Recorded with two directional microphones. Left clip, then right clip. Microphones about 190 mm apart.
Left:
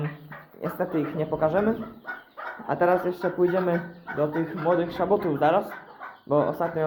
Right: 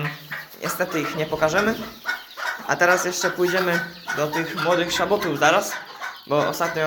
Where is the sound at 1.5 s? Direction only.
20° left (ahead or behind).